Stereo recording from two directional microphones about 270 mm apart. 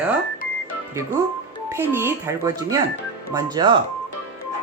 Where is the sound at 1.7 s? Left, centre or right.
Centre.